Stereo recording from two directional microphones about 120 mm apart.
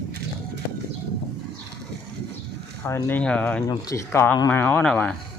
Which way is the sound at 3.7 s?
25° left (ahead or behind).